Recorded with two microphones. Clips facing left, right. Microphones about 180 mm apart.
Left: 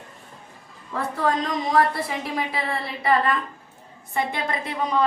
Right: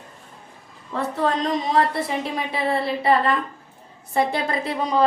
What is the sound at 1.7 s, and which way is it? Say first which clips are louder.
A woman's voice: left 2 dB; 25° right (ahead or behind).